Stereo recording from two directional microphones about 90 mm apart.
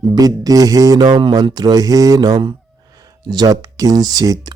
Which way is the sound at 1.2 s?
65° right (ahead or behind).